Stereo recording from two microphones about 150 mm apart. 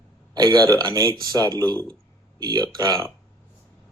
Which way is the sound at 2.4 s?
25° right (ahead or behind).